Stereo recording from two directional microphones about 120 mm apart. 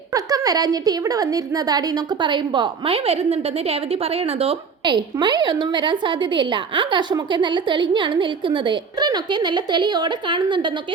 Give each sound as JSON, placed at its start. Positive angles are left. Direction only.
{"t": 0.1, "sound": "a woman's voice", "side_deg": -30}
{"t": 4.9, "sound": "a woman's voice", "side_deg": -40}